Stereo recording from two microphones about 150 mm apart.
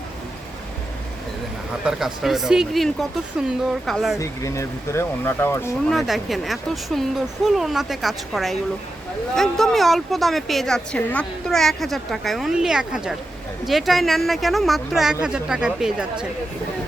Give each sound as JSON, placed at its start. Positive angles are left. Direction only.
{"t": 1.8, "sound": "speech", "side_deg": -5}
{"t": 4.2, "sound": "speech", "side_deg": 20}
{"t": 5.9, "sound": "speech", "side_deg": 0}